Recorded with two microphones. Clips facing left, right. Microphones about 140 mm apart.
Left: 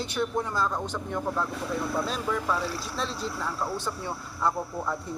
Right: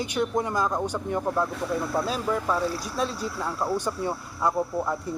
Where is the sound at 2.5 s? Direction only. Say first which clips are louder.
Right 3 dB; 15° right (ahead or behind).